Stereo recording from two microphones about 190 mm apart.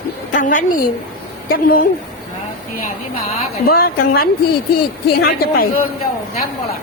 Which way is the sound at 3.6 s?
50° left (ahead or behind).